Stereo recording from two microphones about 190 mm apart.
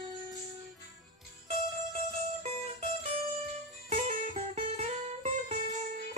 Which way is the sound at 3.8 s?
40° right (ahead or behind).